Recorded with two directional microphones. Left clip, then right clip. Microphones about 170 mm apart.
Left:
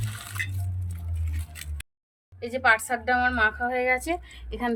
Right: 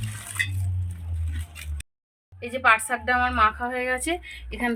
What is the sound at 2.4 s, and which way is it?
Speech, 20° left (ahead or behind).